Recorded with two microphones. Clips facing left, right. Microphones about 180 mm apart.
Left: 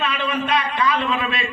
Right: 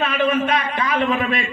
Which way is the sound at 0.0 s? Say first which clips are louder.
Right 5 dB; 50° right (ahead or behind).